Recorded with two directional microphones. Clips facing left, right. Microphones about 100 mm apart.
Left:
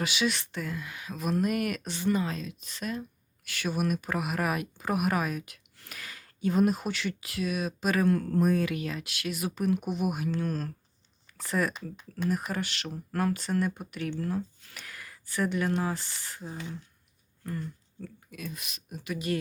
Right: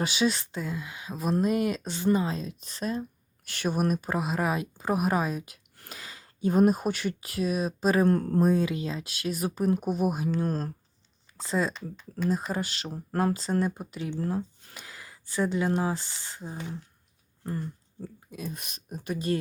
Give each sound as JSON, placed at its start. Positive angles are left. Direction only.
{"t": 0.0, "sound": "speech", "side_deg": -30}
{"t": 5.9, "sound": "a sound", "side_deg": -30}
{"t": 6.5, "sound": "speech", "side_deg": -40}
{"t": 11.3, "sound": "speech", "side_deg": -20}
{"t": 12.5, "sound": "speech", "side_deg": -35}
{"t": 18.5, "sound": "speech", "side_deg": -40}